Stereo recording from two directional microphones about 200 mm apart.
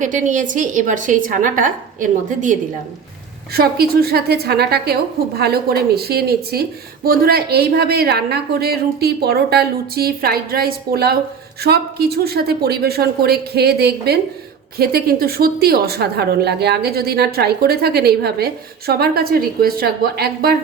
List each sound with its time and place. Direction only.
0.0 s a woman's voice: 40° right (ahead or behind)